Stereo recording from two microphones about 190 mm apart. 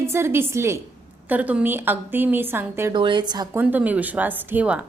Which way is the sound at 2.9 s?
25° right (ahead or behind).